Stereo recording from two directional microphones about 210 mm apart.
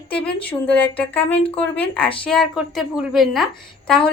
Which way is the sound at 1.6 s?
5° left (ahead or behind).